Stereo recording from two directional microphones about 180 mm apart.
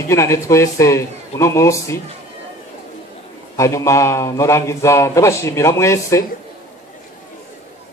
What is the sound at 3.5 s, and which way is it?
A man's voice, 15° left (ahead or behind).